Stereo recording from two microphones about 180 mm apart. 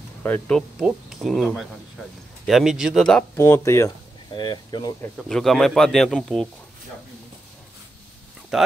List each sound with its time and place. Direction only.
0.2 s speech: 5° left (ahead or behind)
3.3 s speech: 15° left (ahead or behind)
5.1 s speech: centre (ahead or behind)
8.5 s speech: centre (ahead or behind)